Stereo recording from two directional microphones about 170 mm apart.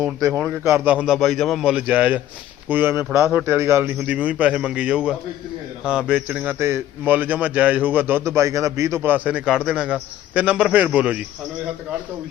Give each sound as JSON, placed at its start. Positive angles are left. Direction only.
{"t": 0.0, "sound": "a man's voice", "side_deg": -20}